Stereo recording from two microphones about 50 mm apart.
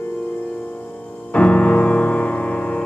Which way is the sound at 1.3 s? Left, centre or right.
Left.